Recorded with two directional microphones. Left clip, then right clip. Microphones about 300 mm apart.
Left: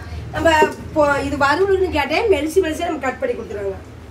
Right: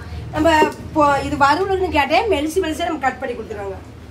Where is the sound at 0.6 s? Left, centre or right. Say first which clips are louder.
Even; centre.